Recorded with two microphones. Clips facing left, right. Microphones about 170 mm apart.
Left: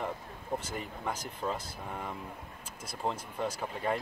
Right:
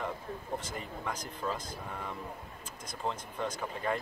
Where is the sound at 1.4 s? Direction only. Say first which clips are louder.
Left 1 dB; 25° left (ahead or behind).